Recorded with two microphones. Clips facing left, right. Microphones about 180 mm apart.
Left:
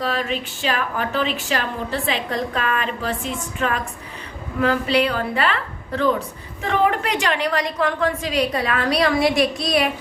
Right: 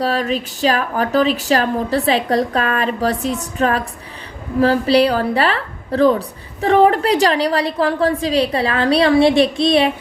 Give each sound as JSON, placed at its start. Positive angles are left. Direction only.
{"t": 0.0, "sound": "a woman's voice", "side_deg": -40}